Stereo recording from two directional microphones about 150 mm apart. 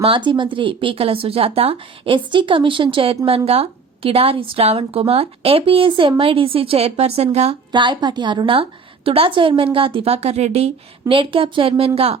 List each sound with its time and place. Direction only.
0.0 s a woman's voice: 35° right (ahead or behind)
7.7 s a woman's voice: 30° right (ahead or behind)